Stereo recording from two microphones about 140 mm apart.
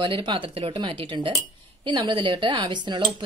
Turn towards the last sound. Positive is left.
turn(degrees=-35)  # may be behind; listen again after turning